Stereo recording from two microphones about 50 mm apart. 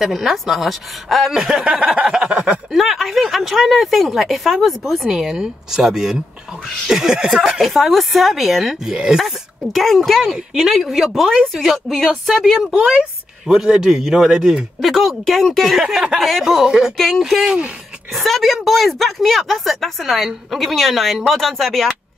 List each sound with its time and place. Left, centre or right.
0.0 s a woman's voice: centre
2.0 s a sound: centre
2.7 s a woman's voice: centre
8.9 s a man's voice: centre
9.2 s a woman's voice: centre
13.5 s a man's voice: centre
14.8 s a woman's voice: centre
16.6 s a man's voice: centre
16.9 s a woman's voice: centre